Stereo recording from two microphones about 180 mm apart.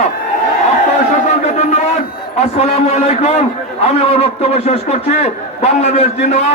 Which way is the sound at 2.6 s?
35° left (ahead or behind).